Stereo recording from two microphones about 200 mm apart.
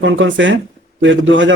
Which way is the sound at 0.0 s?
65° right (ahead or behind).